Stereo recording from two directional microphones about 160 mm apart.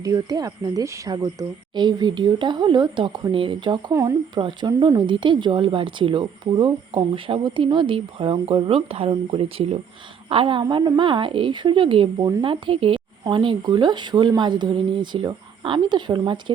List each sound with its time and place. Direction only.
0.0 s speech: 25° right (ahead or behind)